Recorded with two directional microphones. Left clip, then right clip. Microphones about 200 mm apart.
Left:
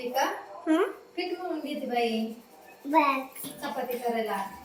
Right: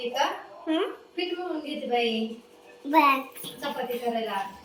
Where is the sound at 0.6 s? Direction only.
50° left (ahead or behind).